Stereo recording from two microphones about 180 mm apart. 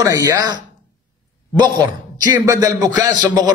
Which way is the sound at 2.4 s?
20° right (ahead or behind).